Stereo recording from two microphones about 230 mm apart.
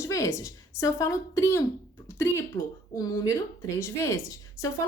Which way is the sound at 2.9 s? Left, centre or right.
Centre.